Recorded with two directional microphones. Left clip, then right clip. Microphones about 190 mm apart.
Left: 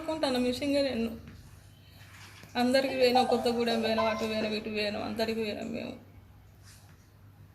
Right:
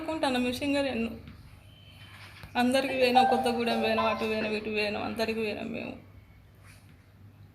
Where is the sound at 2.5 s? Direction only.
5° left (ahead or behind).